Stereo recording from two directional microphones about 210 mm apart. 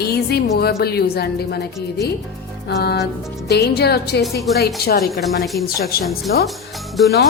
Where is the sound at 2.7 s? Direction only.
50° left (ahead or behind).